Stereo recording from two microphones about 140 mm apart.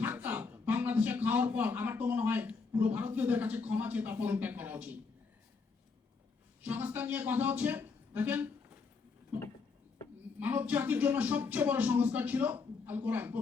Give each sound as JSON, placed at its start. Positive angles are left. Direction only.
{"t": 0.0, "sound": "a man's voice", "side_deg": -15}
{"t": 6.7, "sound": "a man's voice", "side_deg": -15}
{"t": 10.4, "sound": "speech", "side_deg": -10}